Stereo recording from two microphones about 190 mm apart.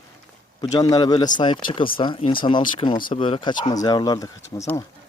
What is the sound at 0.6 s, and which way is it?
Speech, 20° left (ahead or behind).